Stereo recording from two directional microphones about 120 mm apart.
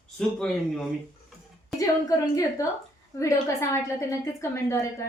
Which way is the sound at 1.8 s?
30° left (ahead or behind).